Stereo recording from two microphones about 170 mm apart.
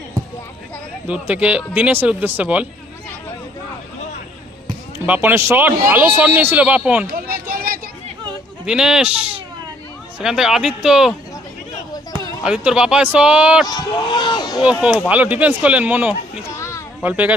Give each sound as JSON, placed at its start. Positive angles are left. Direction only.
{"t": 1.0, "sound": "speech", "side_deg": -5}
{"t": 5.0, "sound": "speech", "side_deg": -10}
{"t": 7.1, "sound": "a sound", "side_deg": -60}
{"t": 8.6, "sound": "speech", "side_deg": -5}
{"t": 12.4, "sound": "speech", "side_deg": -5}
{"t": 13.7, "sound": "speech", "side_deg": 25}
{"t": 14.6, "sound": "speech", "side_deg": -5}
{"t": 16.5, "sound": "children playing", "side_deg": 15}
{"t": 17.0, "sound": "speech", "side_deg": -10}